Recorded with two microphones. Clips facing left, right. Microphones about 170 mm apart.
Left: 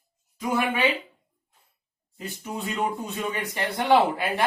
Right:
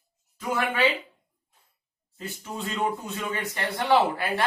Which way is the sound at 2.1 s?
15° left (ahead or behind).